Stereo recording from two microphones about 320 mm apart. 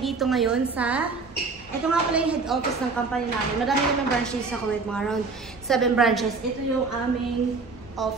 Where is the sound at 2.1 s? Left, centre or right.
Centre.